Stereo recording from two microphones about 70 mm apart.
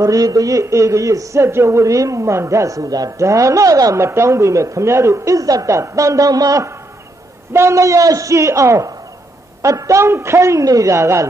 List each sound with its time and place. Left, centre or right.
0.0 s a man's voice: right
4.0 s a man's voice: right
7.5 s a man's voice: right